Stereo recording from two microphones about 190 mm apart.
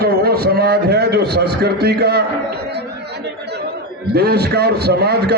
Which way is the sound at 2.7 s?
60° right (ahead or behind).